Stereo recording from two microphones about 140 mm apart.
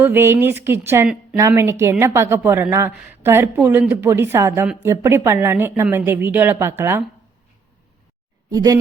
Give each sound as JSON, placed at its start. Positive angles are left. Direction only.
{"t": 0.0, "sound": "a woman's voice", "side_deg": -15}
{"t": 8.4, "sound": "a woman's voice", "side_deg": -25}